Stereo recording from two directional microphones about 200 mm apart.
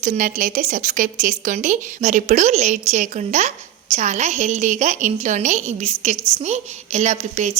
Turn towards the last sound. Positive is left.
turn(degrees=-35)  # may be behind; listen again after turning